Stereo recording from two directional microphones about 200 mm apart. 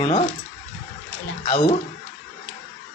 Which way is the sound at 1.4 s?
25° left (ahead or behind).